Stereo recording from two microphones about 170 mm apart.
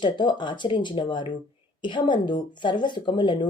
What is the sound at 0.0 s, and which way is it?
Speech, 25° left (ahead or behind).